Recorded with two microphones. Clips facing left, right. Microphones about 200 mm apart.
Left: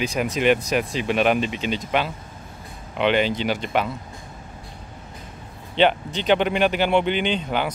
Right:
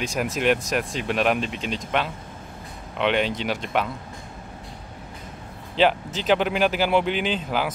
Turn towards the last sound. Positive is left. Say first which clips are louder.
# left 1 dB
turn(degrees=0)  # may be behind; listen again after turning